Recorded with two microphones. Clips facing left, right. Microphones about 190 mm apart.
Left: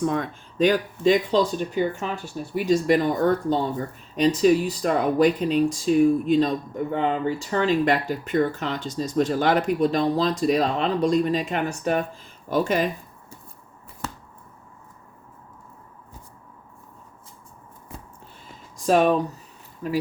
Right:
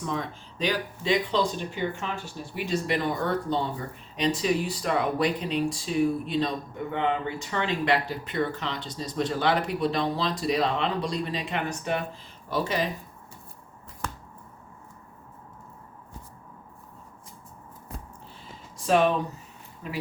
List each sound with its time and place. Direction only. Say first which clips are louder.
0.0 s speech: left 7 dB; 50° left (ahead or behind)
18.9 s speech: left 3 dB; 40° left (ahead or behind)